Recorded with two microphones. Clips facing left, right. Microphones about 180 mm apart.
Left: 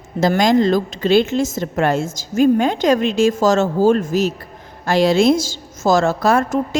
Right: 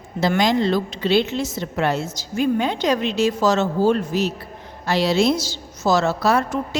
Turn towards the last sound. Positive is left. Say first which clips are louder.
# left 3 dB
turn(degrees=50)  # may be behind; listen again after turning